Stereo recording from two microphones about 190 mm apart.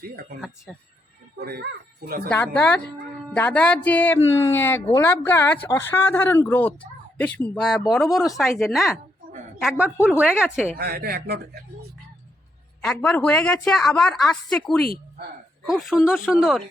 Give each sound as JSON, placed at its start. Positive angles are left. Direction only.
{"t": 0.0, "sound": "speech", "side_deg": -55}
{"t": 0.4, "sound": "speech", "side_deg": 0}
{"t": 1.4, "sound": "speech", "side_deg": -55}
{"t": 2.3, "sound": "speech", "side_deg": 5}
{"t": 10.8, "sound": "speech", "side_deg": -55}
{"t": 12.8, "sound": "speech", "side_deg": 5}